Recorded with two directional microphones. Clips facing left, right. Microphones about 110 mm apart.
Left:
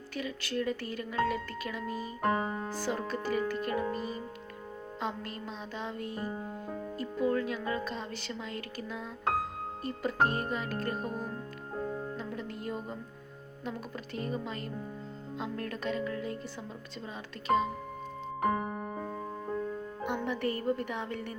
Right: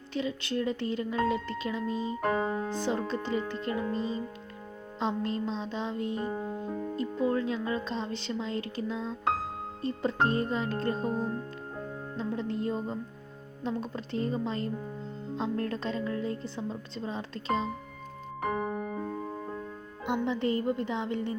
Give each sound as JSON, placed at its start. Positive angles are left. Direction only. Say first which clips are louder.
{"t": 0.1, "sound": "speech", "louder": "right 4 dB", "side_deg": -25}
{"t": 18.6, "sound": "music", "louder": "right 4 dB", "side_deg": 0}
{"t": 20.1, "sound": "speech", "louder": "right 4 dB", "side_deg": -20}